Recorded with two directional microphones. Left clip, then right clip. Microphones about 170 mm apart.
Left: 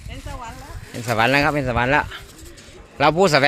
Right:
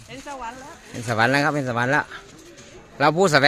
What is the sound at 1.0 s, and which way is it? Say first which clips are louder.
Speech: left 2 dB; 15° left (ahead or behind).